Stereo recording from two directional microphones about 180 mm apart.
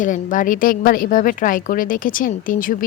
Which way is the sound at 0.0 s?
45° left (ahead or behind).